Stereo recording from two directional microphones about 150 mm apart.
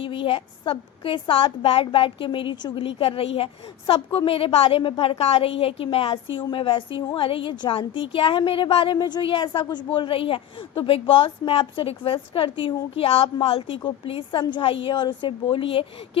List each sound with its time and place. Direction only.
0.0 s a woman's voice: 35° left (ahead or behind)